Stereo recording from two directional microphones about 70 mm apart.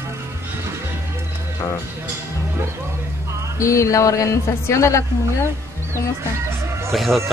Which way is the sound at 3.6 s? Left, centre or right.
Left.